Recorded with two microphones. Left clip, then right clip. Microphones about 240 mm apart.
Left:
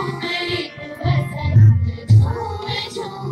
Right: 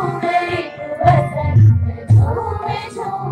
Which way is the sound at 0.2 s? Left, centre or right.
Left.